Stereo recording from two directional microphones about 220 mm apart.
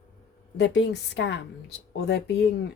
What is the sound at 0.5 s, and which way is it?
Speech, 55° left (ahead or behind).